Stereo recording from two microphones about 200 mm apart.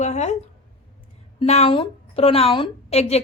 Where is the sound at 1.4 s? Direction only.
30° left (ahead or behind).